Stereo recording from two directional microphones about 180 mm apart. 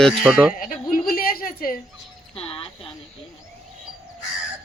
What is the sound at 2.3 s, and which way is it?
Music, 30° left (ahead or behind).